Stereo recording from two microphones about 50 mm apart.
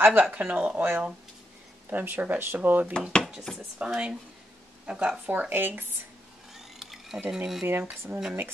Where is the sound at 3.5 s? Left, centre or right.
Centre.